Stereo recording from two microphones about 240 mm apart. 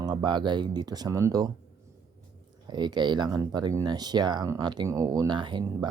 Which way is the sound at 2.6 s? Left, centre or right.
Centre.